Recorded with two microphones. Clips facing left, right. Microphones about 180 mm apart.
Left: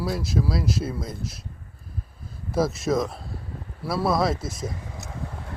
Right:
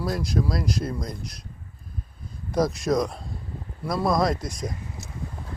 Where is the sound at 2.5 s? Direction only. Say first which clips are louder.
Even; 5° left (ahead or behind).